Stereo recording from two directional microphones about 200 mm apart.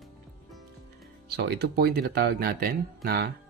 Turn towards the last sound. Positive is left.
turn(degrees=-50)  # may be behind; listen again after turning